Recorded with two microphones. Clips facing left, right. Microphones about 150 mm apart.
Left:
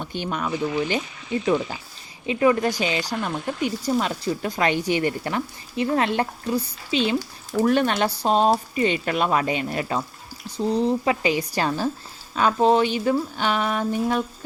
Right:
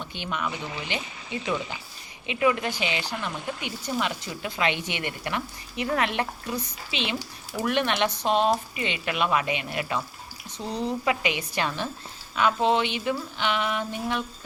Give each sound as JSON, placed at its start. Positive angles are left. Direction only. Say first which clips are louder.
{"t": 0.0, "sound": "speech", "louder": "left 4 dB", "side_deg": 45}
{"t": 2.2, "sound": "speech", "louder": "left 5 dB", "side_deg": 35}